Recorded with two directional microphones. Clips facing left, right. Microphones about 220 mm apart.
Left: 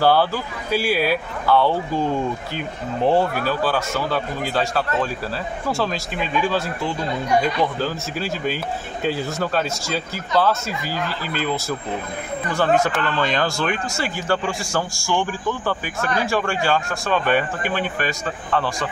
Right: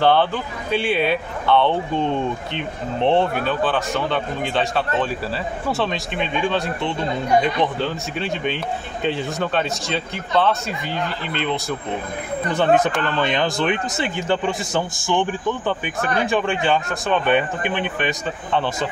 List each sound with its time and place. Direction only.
0.0 s speech: 5° left (ahead or behind)
12.4 s a man's voice: 20° right (ahead or behind)